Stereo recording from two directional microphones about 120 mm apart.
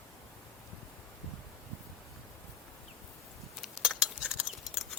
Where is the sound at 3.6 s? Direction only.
5° right (ahead or behind).